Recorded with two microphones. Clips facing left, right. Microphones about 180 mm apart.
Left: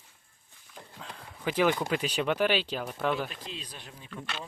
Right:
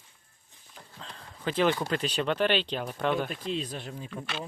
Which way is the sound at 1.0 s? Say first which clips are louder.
Even; 10° left (ahead or behind).